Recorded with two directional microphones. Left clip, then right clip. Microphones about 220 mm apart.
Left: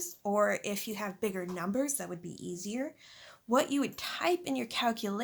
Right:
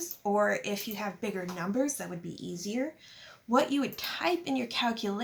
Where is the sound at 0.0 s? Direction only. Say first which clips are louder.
Right 1 dB; 50° left (ahead or behind).